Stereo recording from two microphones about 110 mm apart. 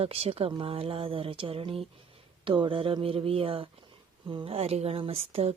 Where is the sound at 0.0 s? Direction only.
60° right (ahead or behind).